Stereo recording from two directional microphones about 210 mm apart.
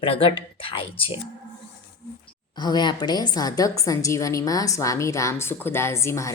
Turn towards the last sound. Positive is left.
turn(degrees=15)  # may be behind; listen again after turning